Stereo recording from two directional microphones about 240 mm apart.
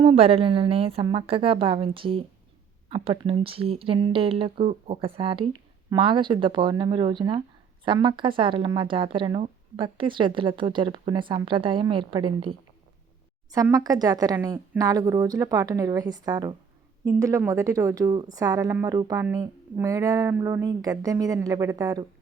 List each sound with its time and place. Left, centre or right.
0.0 s a woman's voice: right